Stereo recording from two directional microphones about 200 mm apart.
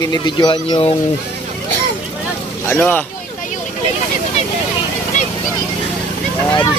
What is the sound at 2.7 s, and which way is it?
Speech, 10° left (ahead or behind).